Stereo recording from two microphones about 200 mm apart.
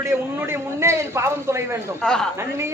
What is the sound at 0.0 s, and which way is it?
A man's voice, 15° right (ahead or behind).